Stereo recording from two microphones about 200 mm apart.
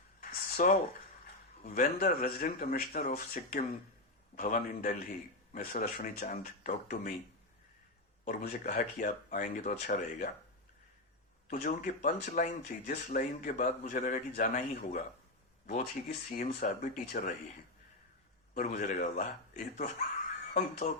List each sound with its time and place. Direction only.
0.2 s a sound: 45° left (ahead or behind)
1.6 s speech: 40° left (ahead or behind)
3.0 s speech: 35° left (ahead or behind)
8.2 s speech: 40° left (ahead or behind)
11.5 s speech: 35° left (ahead or behind)
12.8 s speech: 50° left (ahead or behind)
15.7 s speech: 40° left (ahead or behind)
18.5 s speech: 45° left (ahead or behind)